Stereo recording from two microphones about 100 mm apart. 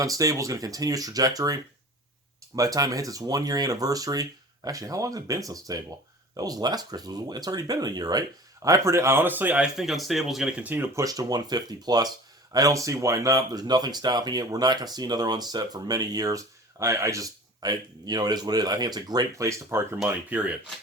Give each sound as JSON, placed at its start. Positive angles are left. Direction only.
{"t": 0.0, "sound": "speech", "side_deg": -35}
{"t": 2.6, "sound": "speech", "side_deg": -35}
{"t": 9.7, "sound": "speech", "side_deg": 0}
{"t": 10.6, "sound": "speech", "side_deg": -15}
{"t": 10.9, "sound": "speech", "side_deg": -35}
{"t": 20.1, "sound": "speech", "side_deg": -15}